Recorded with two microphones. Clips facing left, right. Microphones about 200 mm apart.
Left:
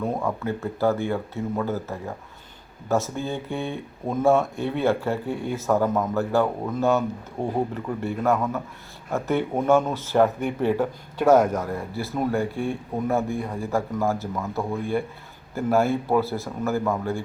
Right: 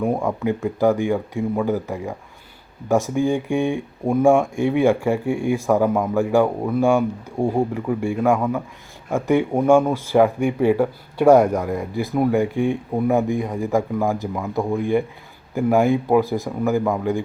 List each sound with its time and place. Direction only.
0.0 s speech: 15° right (ahead or behind)